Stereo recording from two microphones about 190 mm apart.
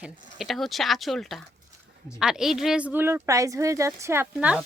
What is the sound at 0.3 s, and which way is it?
A woman's voice, centre (ahead or behind).